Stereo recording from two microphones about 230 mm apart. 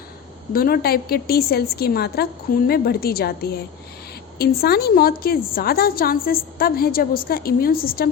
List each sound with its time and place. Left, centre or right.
0.5 s a woman's voice: left
4.4 s a woman's voice: left